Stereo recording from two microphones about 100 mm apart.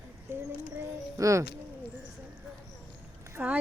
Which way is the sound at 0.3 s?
25° right (ahead or behind).